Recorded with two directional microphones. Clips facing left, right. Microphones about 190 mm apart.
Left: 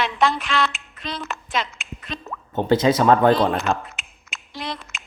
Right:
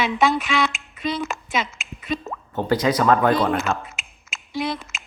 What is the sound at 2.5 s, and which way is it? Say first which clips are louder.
Speech: left 3 dB; 25° left (ahead or behind).